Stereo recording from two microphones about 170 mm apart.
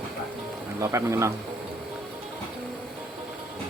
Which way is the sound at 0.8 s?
15° right (ahead or behind).